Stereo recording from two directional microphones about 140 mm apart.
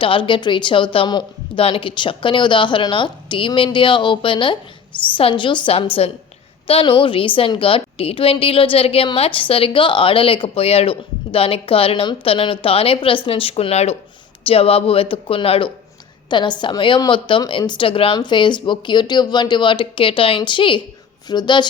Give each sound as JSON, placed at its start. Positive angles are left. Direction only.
{"t": 0.0, "sound": "a woman's voice", "side_deg": 35}